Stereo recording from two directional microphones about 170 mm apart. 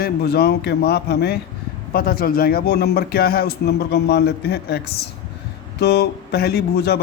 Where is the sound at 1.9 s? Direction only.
60° left (ahead or behind).